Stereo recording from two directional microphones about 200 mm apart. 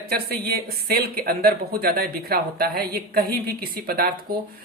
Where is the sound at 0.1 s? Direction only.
50° right (ahead or behind).